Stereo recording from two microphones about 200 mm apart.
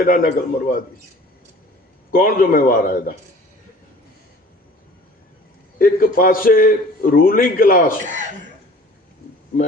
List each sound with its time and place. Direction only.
0.0 s a man's voice: 45° left (ahead or behind)
2.1 s a man's voice: 45° left (ahead or behind)
5.8 s a man's voice: 45° left (ahead or behind)
8.0 s speech: 40° right (ahead or behind)